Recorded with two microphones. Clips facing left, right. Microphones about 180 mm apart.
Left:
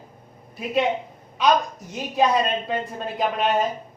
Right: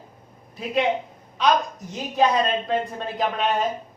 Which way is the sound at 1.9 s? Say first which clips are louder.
Even; centre (ahead or behind).